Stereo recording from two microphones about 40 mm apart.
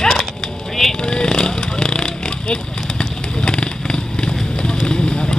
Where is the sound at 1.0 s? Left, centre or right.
Centre.